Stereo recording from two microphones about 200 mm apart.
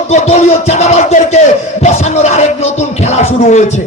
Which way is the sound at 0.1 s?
35° left (ahead or behind).